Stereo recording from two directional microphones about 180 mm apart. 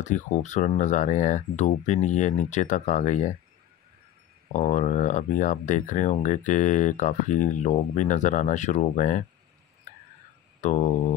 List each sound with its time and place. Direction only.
0.0 s speech: 40° left (ahead or behind)
4.5 s speech: 40° left (ahead or behind)
10.6 s a sound: 40° left (ahead or behind)